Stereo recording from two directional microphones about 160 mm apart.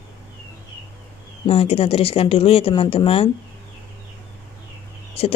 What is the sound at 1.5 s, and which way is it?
Speech, 35° left (ahead or behind).